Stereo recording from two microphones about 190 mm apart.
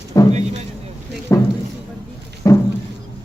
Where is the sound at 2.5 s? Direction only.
15° left (ahead or behind).